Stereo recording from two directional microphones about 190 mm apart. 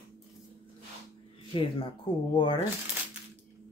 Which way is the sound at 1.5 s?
25° left (ahead or behind).